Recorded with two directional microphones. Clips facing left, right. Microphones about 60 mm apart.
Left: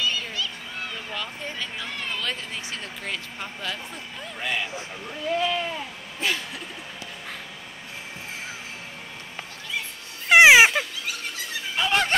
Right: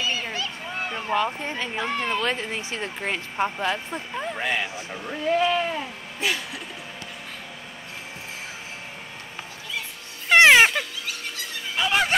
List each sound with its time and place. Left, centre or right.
0.0 s speech: right
4.9 s speech: right
6.2 s speech: centre
10.2 s music: centre